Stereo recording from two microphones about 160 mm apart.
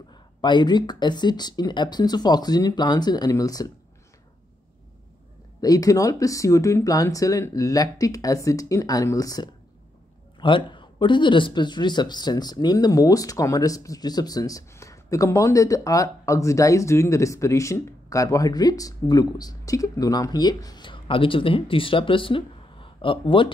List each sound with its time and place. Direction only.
0.4 s speech: 30° left (ahead or behind)
5.6 s speech: 20° left (ahead or behind)